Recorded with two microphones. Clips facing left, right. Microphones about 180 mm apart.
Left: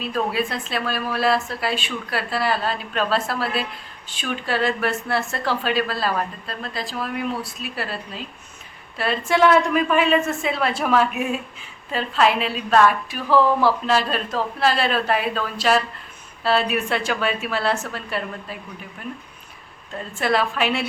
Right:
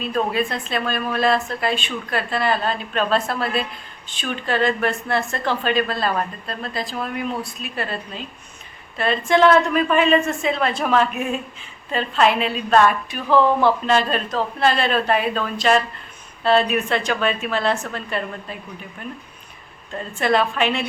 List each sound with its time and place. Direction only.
0.0 s a woman's voice: 5° left (ahead or behind)
20.1 s a woman's voice: 5° left (ahead or behind)